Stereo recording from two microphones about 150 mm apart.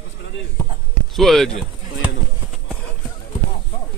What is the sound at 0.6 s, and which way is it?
Speech, 20° left (ahead or behind).